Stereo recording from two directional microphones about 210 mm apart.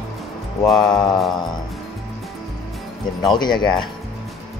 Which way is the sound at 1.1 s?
Centre (ahead or behind).